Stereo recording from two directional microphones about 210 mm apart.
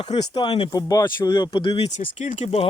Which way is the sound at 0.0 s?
25° left (ahead or behind).